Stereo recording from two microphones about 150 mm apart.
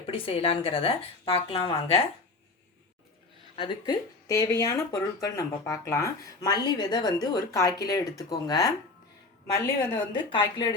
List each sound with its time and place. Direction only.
0.0 s speech: 35° left (ahead or behind)
3.5 s speech: 35° left (ahead or behind)